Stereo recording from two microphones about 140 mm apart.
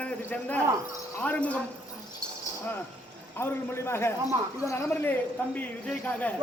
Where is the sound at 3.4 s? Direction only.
15° left (ahead or behind).